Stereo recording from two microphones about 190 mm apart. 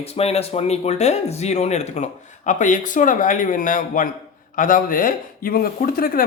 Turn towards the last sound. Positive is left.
turn(degrees=50)  # may be behind; listen again after turning